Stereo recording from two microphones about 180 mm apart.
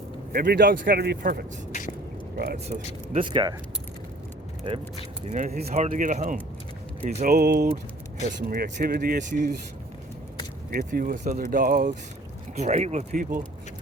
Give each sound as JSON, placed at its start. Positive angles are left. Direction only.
{"t": 0.3, "sound": "speech", "side_deg": -55}
{"t": 1.7, "sound": "drip", "side_deg": 45}
{"t": 2.6, "sound": "speech", "side_deg": -30}
{"t": 4.7, "sound": "speech", "side_deg": -35}
{"t": 10.7, "sound": "speech", "side_deg": -50}
{"t": 12.5, "sound": "speech", "side_deg": -40}